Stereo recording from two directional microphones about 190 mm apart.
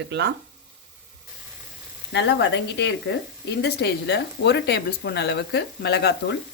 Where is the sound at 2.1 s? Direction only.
70° left (ahead or behind).